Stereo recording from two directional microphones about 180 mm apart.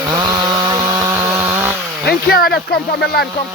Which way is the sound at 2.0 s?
60° left (ahead or behind).